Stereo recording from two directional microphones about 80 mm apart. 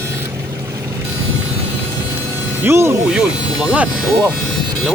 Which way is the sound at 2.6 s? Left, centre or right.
Right.